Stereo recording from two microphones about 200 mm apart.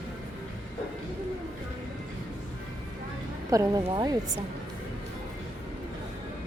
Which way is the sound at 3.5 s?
15° right (ahead or behind).